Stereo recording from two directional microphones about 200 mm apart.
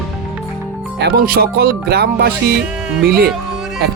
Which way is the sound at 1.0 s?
50° right (ahead or behind).